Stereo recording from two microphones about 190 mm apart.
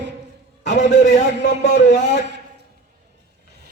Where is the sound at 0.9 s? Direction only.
65° left (ahead or behind).